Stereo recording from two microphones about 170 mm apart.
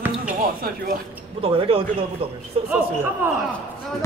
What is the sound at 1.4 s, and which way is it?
Speech, 35° right (ahead or behind).